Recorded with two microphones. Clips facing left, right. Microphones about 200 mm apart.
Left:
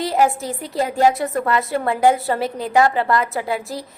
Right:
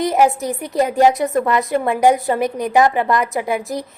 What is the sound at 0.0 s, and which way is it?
A woman's voice, 20° right (ahead or behind).